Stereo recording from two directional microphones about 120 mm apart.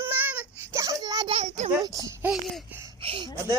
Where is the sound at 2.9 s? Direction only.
50° right (ahead or behind).